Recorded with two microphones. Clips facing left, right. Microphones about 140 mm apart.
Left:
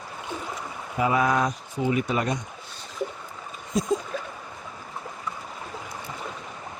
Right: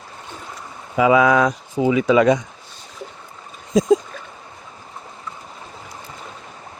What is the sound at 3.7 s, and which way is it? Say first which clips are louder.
Speech: right 9 dB; 90° right.